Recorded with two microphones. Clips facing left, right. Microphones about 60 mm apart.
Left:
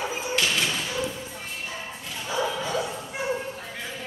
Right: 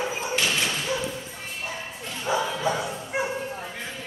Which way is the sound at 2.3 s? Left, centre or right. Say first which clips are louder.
Right 2 dB; right.